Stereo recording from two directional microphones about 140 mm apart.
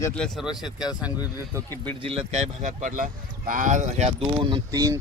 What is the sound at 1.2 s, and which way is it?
Speech, 20° right (ahead or behind).